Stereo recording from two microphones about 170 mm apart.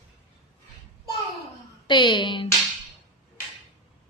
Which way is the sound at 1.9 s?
25° left (ahead or behind).